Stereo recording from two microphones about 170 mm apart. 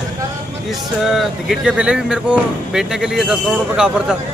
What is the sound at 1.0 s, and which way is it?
Speech, centre (ahead or behind).